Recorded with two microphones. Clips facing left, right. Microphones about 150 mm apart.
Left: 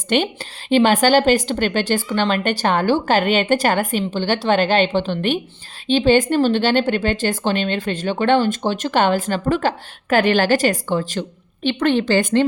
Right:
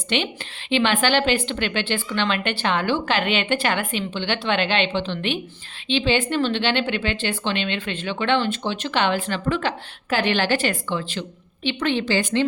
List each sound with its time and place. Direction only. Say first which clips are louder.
0.1 s speech: left 6 dB; 45° left (ahead or behind)